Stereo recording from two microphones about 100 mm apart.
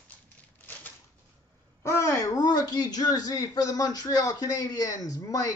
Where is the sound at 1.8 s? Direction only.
30° left (ahead or behind).